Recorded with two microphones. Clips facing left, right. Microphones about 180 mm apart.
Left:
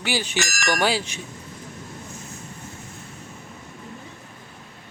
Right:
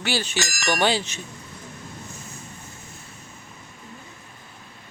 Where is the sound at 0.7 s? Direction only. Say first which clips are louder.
Right 1 dB; 5° left (ahead or behind).